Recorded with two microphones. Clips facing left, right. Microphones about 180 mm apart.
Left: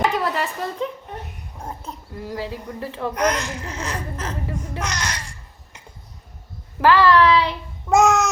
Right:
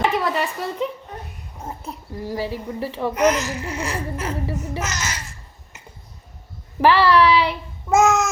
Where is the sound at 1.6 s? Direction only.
10° right (ahead or behind).